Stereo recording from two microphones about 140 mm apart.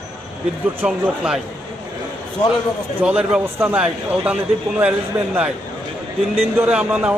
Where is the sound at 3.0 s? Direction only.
10° right (ahead or behind).